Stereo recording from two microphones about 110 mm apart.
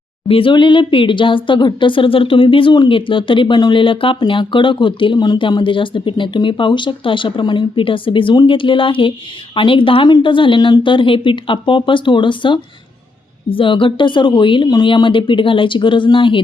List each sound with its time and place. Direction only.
0.3 s speech: 55° left (ahead or behind)